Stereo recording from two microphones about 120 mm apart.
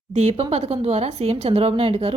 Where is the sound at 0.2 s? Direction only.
60° right (ahead or behind).